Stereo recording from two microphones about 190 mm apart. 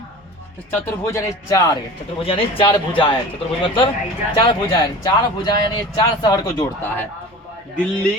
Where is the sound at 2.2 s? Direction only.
30° left (ahead or behind).